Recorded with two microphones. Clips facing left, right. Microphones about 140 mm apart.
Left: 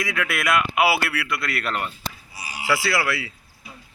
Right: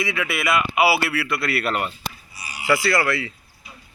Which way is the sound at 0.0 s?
Centre (ahead or behind).